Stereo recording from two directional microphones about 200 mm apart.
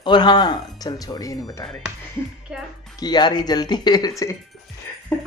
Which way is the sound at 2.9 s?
20° left (ahead or behind).